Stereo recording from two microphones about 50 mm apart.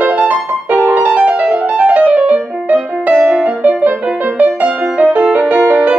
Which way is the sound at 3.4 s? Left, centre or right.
Right.